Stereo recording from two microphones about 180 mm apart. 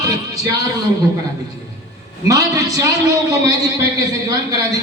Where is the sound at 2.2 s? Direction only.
20° right (ahead or behind).